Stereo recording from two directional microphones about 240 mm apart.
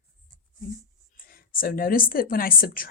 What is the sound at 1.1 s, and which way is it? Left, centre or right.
A woman's voice, left.